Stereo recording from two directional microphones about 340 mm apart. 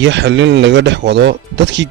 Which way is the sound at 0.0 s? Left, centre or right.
Right.